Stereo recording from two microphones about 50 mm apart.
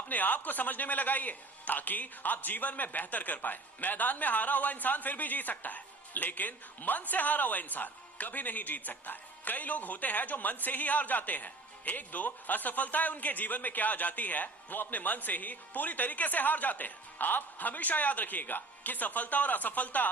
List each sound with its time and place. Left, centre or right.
0.1 s speech: left